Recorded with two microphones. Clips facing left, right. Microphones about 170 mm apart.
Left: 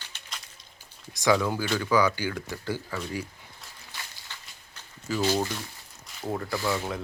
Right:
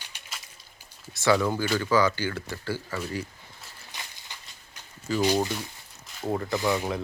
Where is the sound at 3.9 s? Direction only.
15° right (ahead or behind).